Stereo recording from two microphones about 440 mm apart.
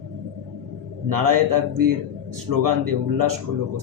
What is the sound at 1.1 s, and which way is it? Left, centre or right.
Speech, right.